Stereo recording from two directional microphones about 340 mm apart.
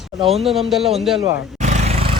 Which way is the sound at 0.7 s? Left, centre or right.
Centre.